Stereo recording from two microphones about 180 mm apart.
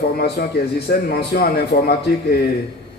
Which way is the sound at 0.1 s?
60° left (ahead or behind).